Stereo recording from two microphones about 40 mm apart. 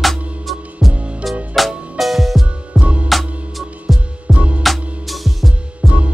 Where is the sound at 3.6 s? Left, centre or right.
Centre.